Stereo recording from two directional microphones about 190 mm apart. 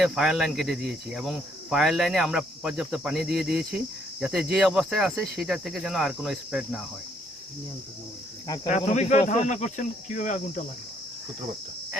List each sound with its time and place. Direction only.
0.0 s speech: centre (ahead or behind)
8.6 s speech: 40° left (ahead or behind)